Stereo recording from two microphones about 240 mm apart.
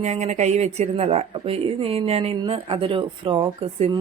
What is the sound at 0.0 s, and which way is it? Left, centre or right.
A woman's voice, right.